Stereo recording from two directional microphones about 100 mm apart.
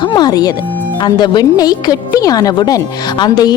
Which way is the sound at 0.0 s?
45° left (ahead or behind).